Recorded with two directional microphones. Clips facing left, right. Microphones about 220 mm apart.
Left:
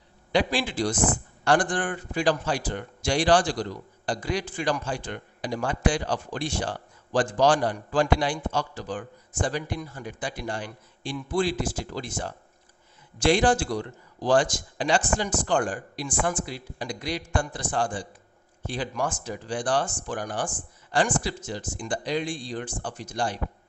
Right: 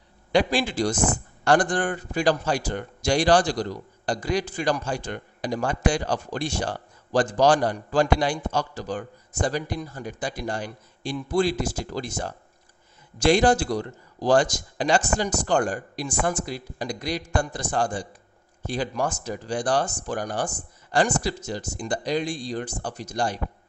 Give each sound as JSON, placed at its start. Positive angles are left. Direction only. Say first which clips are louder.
{"t": 0.3, "sound": "a man's voice", "louder": "right 3 dB", "side_deg": -45}